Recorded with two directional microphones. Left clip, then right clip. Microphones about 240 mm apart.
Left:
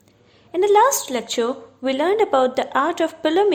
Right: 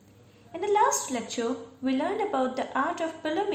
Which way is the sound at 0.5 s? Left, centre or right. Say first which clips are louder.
Left 9 dB; left.